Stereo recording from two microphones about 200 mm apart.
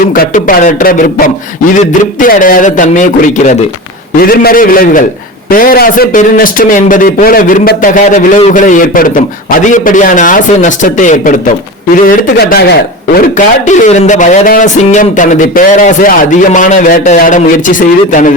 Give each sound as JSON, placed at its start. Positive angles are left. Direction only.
{"t": 0.2, "sound": "a man's voice", "side_deg": 45}
{"t": 12.0, "sound": "a man's voice", "side_deg": 50}
{"t": 13.7, "sound": "speech", "side_deg": 35}